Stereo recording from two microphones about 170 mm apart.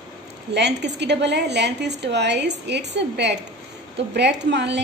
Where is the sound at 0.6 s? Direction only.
90° right.